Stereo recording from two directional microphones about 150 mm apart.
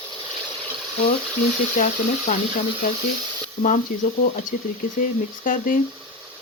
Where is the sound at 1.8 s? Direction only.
60° left (ahead or behind).